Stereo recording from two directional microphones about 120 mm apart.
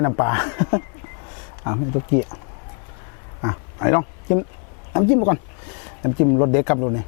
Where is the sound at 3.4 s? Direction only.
20° left (ahead or behind).